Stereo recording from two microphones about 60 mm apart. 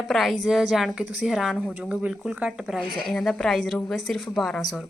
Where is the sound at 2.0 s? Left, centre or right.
Centre.